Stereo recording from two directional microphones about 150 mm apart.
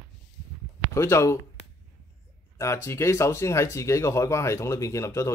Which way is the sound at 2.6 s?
20° left (ahead or behind).